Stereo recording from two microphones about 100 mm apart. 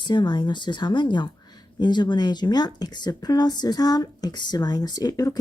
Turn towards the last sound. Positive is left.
turn(degrees=40)  # may be behind; listen again after turning